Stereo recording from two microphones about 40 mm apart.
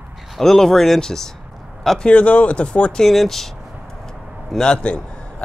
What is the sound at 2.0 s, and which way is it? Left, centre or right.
Speech, left.